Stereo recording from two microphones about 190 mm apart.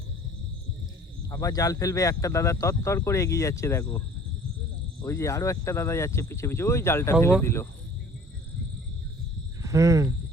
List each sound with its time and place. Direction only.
1.3 s speech: 15° left (ahead or behind)
5.0 s speech: 15° left (ahead or behind)
9.6 s speech: 15° right (ahead or behind)